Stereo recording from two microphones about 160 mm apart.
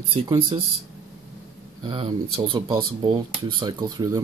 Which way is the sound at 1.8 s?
30° right (ahead or behind).